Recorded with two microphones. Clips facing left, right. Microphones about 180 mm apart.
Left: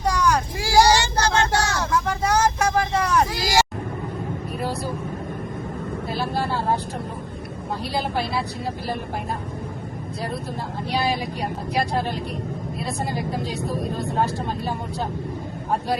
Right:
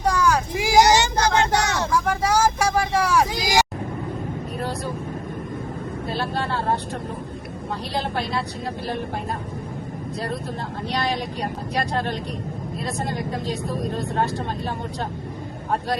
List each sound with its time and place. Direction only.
0.0 s vehicle: 5° right (ahead or behind)
0.5 s child singing: 20° right (ahead or behind)
2.0 s vehicle: 10° right (ahead or behind)
7.9 s speech: 5° left (ahead or behind)
10.9 s speech: 10° left (ahead or behind)